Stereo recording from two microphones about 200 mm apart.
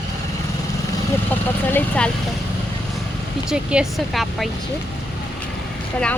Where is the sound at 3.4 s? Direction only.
5° right (ahead or behind).